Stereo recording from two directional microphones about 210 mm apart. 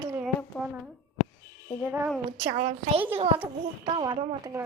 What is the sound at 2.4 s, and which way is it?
A woman's voice, 25° right (ahead or behind).